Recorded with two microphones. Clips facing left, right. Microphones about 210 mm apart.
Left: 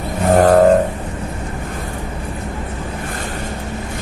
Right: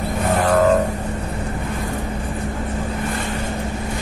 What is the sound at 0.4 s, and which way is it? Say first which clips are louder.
Vehicle: left 7 dB; 45° left (ahead or behind).